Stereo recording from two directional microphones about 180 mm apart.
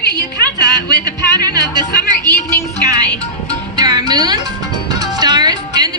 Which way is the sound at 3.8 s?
20° right (ahead or behind).